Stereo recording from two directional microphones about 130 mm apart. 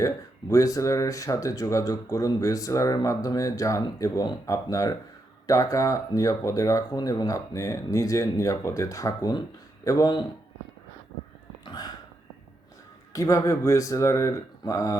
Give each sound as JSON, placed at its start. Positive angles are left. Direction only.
{"t": 0.0, "sound": "speech", "side_deg": 25}
{"t": 11.6, "sound": "a sound", "side_deg": 30}
{"t": 13.1, "sound": "speech", "side_deg": 25}